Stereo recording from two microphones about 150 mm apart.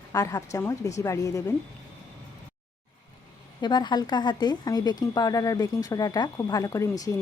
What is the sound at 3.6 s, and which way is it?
Speech, 30° left (ahead or behind).